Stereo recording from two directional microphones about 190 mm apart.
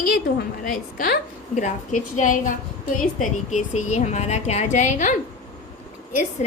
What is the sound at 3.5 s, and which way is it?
A woman's voice, 35° left (ahead or behind).